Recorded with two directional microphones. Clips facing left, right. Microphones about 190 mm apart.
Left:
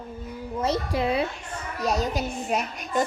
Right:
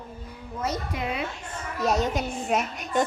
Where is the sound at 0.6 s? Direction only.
30° left (ahead or behind).